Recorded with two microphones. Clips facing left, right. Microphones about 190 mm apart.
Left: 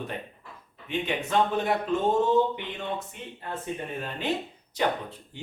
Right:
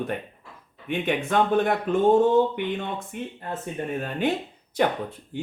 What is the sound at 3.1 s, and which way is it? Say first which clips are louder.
Speech: right 9 dB; 50° right (ahead or behind).